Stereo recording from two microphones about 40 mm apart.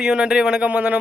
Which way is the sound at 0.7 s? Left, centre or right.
Right.